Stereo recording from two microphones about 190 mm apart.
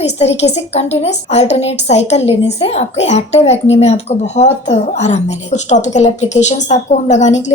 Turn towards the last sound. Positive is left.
turn(degrees=40)  # may be behind; listen again after turning